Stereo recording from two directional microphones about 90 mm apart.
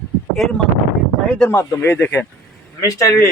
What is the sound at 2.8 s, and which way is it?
Speech, 35° left (ahead or behind).